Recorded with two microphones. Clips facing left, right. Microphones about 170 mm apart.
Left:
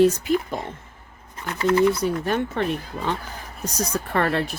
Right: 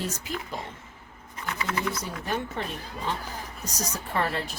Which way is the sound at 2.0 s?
65° left (ahead or behind).